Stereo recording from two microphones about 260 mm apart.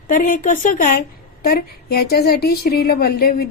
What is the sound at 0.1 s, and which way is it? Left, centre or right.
A woman's voice, left.